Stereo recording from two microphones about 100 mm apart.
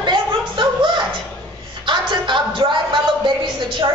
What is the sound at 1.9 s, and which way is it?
Music, 50° right (ahead or behind).